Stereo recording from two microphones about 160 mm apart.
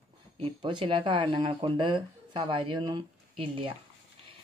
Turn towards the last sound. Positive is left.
turn(degrees=-30)  # may be behind; listen again after turning